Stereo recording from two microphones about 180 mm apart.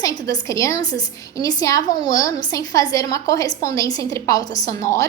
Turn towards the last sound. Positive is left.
turn(degrees=15)  # may be behind; listen again after turning